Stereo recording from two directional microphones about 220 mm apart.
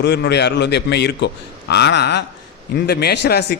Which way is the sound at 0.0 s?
50° left (ahead or behind).